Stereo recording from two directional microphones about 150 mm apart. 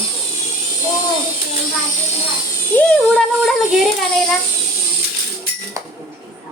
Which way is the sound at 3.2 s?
Centre (ahead or behind).